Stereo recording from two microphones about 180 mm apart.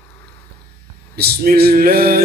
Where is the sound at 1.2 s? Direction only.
60° right (ahead or behind).